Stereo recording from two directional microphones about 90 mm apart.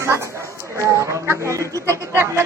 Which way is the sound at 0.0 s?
30° right (ahead or behind).